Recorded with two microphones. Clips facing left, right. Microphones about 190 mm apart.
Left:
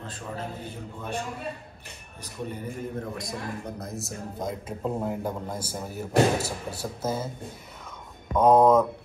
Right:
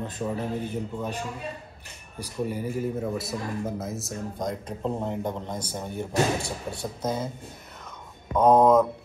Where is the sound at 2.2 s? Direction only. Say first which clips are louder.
Right 5 dB; 5° right (ahead or behind).